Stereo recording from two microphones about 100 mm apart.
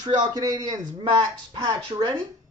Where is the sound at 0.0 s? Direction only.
45° right (ahead or behind).